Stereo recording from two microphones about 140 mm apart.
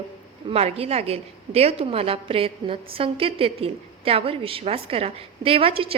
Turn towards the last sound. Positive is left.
turn(degrees=-40)  # may be behind; listen again after turning